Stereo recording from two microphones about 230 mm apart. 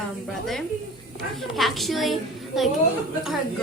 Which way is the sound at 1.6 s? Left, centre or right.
Centre.